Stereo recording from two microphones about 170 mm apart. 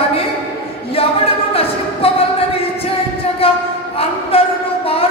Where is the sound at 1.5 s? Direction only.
35° left (ahead or behind).